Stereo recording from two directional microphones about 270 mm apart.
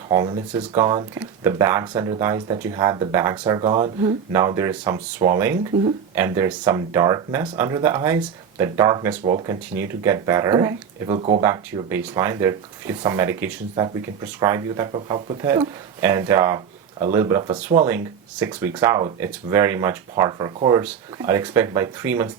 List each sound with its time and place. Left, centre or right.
0.1 s speech: centre